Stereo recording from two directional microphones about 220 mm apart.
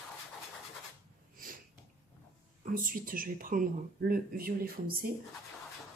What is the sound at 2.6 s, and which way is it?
Speech, 40° right (ahead or behind).